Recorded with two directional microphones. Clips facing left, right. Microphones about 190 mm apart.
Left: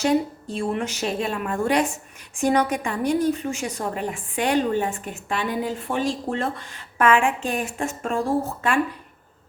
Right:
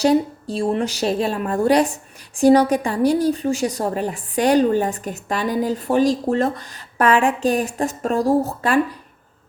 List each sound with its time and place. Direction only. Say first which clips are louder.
0.0 s a woman's voice: right 4 dB; 35° right (ahead or behind)